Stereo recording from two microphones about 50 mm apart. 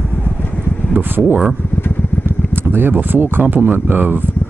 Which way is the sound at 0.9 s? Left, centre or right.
Right.